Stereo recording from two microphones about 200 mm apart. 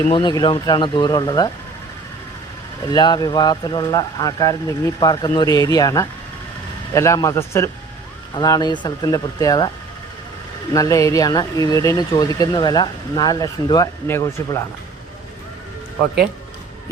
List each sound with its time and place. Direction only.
0.1 s speech: 20° left (ahead or behind)
2.8 s speech: 20° left (ahead or behind)
10.8 s speech: 15° left (ahead or behind)